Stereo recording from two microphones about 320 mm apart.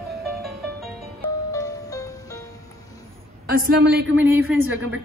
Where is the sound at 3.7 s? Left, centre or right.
Right.